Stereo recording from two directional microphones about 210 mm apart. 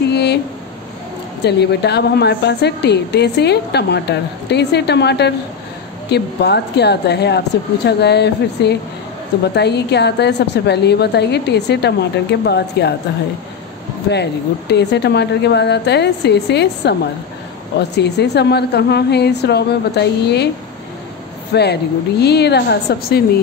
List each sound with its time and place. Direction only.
0.1 s a sound: 50° left (ahead or behind)
1.4 s a woman's voice: 50° left (ahead or behind)
14.7 s a woman's voice: 55° left (ahead or behind)
21.5 s a woman's voice: 50° left (ahead or behind)